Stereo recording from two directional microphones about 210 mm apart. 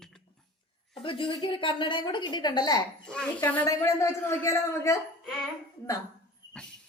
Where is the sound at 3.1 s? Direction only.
5° left (ahead or behind).